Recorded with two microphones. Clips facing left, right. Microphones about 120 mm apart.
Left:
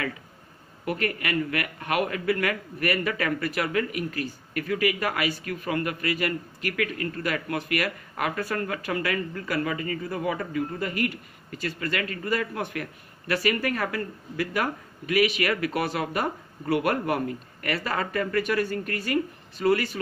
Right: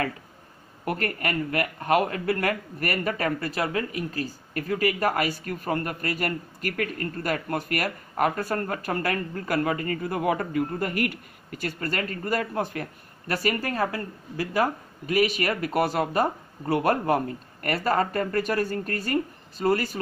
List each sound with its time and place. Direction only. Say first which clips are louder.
0.8 s a man's voice: even; 40° right (ahead or behind)